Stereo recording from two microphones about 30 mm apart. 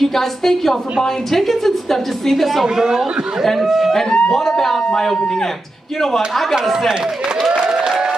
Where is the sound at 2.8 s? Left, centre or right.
Right.